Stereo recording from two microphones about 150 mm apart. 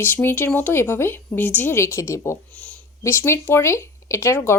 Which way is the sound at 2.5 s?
10° left (ahead or behind).